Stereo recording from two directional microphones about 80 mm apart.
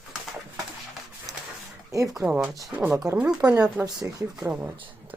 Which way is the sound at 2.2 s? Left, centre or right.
Centre.